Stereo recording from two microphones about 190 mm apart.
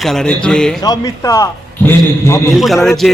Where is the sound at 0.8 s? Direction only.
20° left (ahead or behind).